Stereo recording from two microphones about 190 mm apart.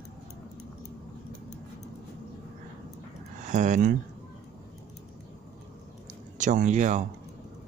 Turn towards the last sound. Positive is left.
turn(degrees=-40)  # may be behind; listen again after turning